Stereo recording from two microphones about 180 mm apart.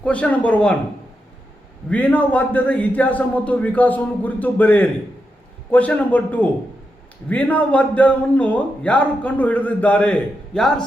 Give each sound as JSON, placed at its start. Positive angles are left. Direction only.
{"t": 0.0, "sound": "a man's voice", "side_deg": 5}
{"t": 1.9, "sound": "a man's voice", "side_deg": 10}